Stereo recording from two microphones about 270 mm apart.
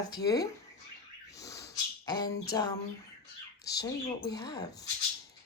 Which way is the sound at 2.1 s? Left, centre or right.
Centre.